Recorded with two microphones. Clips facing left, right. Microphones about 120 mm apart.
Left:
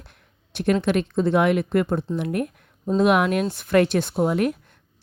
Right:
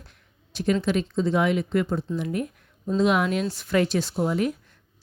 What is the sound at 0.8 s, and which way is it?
Speech, 60° left (ahead or behind).